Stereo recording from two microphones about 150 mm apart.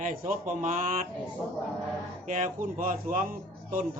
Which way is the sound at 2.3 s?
60° right (ahead or behind).